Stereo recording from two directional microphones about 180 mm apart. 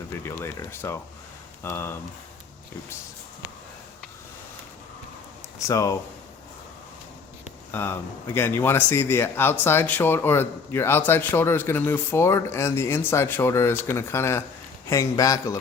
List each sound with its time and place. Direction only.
0.2 s a sound: 15° left (ahead or behind)
1.6 s speech: 10° left (ahead or behind)
5.5 s speech: 15° left (ahead or behind)
7.7 s a man's voice: 10° left (ahead or behind)